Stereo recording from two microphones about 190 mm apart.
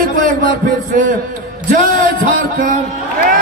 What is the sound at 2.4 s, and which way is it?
Speech, 45° right (ahead or behind).